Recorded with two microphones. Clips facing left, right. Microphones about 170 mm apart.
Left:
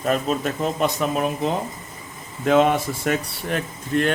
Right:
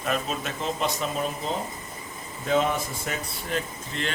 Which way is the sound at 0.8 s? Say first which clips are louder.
Left 6 dB; 60° left (ahead or behind).